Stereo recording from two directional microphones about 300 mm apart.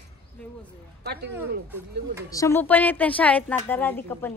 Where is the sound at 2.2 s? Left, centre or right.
Centre.